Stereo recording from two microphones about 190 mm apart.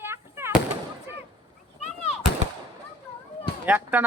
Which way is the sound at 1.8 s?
35° left (ahead or behind).